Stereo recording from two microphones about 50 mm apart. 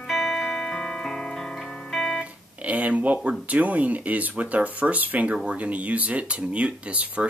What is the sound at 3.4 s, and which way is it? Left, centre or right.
Speech, right.